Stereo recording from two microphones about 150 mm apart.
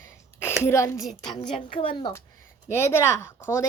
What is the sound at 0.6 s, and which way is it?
Speech, 20° left (ahead or behind).